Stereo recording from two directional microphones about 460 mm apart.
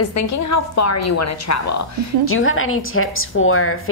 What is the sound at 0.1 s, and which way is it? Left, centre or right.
A woman's voice, left.